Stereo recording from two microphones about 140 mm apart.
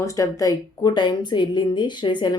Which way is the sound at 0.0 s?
25° left (ahead or behind).